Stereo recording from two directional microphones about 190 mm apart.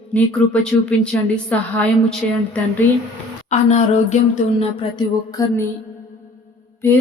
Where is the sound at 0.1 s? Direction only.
5° left (ahead or behind).